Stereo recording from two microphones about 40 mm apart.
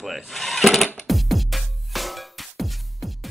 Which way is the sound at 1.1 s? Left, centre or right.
Centre.